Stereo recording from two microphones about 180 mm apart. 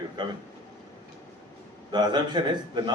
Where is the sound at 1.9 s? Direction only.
25° right (ahead or behind).